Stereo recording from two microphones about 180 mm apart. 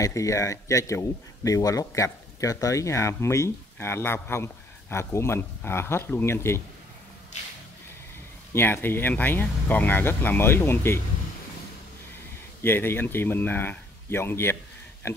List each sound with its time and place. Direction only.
0.0 s speech: 15° left (ahead or behind)
8.5 s speech: 10° left (ahead or behind)
12.6 s speech: 10° left (ahead or behind)